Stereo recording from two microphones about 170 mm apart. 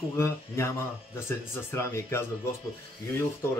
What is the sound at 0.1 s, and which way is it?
Speech, 15° left (ahead or behind).